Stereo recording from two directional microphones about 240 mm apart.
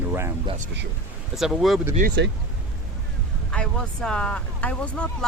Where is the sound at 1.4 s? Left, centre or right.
Centre.